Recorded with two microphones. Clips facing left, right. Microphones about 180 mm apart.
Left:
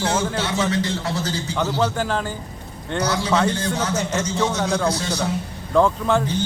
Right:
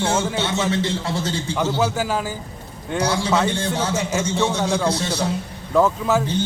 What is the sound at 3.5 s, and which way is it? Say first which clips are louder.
A man's voice: right 1 dB; 30° right (ahead or behind).